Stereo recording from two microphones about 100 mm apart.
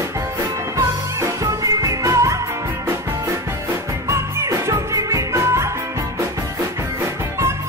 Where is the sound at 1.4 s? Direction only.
35° right (ahead or behind).